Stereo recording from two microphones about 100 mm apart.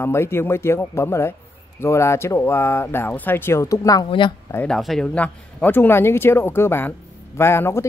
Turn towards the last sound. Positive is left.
turn(degrees=25)  # may be behind; listen again after turning